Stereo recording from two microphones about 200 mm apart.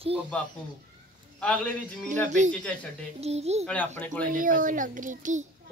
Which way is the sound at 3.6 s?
5° left (ahead or behind).